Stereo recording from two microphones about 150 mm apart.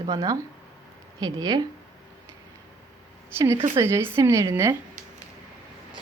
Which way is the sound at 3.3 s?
20° right (ahead or behind).